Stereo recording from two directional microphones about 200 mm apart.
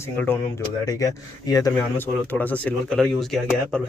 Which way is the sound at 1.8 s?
5° left (ahead or behind).